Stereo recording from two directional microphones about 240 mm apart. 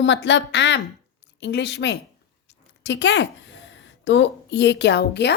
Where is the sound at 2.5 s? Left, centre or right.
Left.